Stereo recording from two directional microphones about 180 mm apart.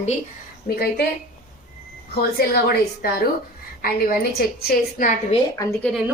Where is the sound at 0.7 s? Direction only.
55° left (ahead or behind).